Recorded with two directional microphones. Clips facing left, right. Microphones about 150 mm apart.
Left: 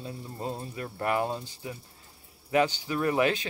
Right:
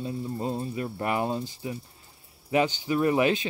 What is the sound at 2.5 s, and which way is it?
Speech, 20° right (ahead or behind).